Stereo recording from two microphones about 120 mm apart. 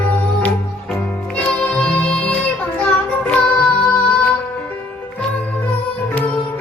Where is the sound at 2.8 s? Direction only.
10° left (ahead or behind).